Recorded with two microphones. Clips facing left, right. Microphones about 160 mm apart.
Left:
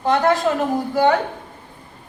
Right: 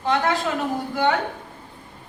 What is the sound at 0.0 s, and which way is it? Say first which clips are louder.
Speech: left 5 dB; 45° left (ahead or behind).